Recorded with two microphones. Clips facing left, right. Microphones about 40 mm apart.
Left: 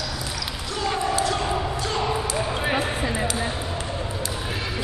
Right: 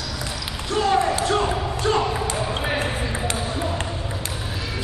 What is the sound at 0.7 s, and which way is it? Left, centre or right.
Basketball bounce, right.